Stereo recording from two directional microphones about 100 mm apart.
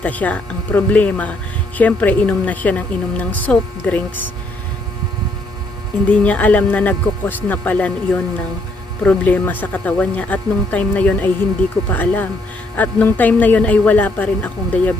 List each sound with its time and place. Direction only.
0.0 s a woman's voice: 15° left (ahead or behind)
6.1 s a woman's voice: 15° left (ahead or behind)